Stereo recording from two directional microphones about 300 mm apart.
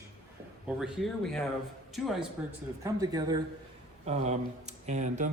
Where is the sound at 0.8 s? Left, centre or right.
Centre.